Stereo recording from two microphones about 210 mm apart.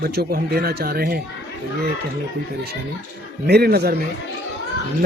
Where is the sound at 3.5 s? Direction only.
50° right (ahead or behind).